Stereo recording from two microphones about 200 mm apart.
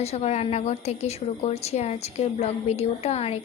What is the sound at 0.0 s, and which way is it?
A woman's voice, 30° left (ahead or behind).